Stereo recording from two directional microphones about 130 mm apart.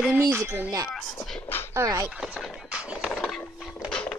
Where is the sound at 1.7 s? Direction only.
25° right (ahead or behind).